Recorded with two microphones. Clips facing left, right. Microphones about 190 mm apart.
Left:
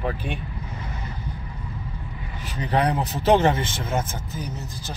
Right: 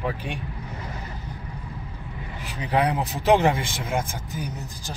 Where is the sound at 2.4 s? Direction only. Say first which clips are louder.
Left 1 dB; 10° right (ahead or behind).